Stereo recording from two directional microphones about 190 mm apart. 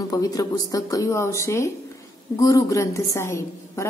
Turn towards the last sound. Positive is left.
turn(degrees=15)  # may be behind; listen again after turning